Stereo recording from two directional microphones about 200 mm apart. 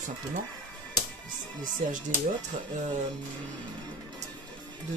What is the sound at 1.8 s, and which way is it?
Speech, 40° right (ahead or behind).